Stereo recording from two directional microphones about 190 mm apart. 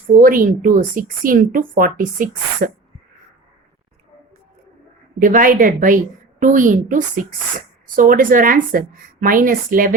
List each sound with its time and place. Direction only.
0.2 s speech: 45° right (ahead or behind)
5.2 s speech: 45° right (ahead or behind)